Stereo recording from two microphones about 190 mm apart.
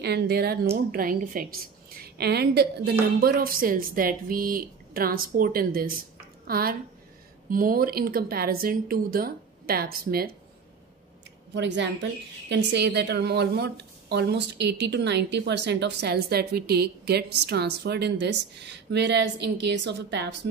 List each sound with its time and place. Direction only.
0.0 s a woman's voice: 60° right (ahead or behind)
2.0 s a woman's voice: 60° right (ahead or behind)
11.5 s speech: 70° right (ahead or behind)